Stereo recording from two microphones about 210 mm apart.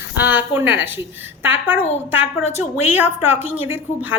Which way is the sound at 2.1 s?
10° right (ahead or behind).